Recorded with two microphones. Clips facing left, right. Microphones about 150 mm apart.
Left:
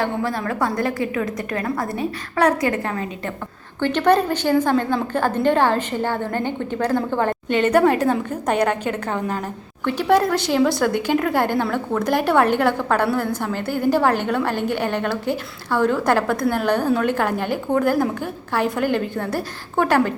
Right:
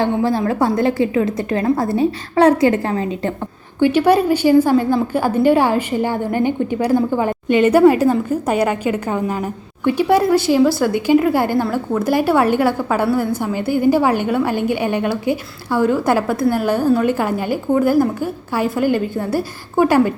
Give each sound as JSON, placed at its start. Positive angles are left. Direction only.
{"t": 0.0, "sound": "a woman's voice", "side_deg": -30}
{"t": 3.8, "sound": "a woman's voice", "side_deg": -10}